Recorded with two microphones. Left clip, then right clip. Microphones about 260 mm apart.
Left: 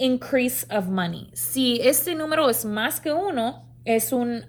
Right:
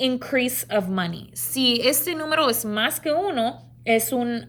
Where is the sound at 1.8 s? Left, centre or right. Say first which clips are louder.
Left 1 dB; right.